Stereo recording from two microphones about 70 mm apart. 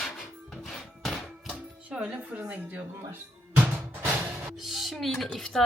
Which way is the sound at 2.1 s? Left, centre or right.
Centre.